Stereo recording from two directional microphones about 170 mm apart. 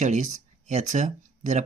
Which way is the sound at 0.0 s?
45° right (ahead or behind).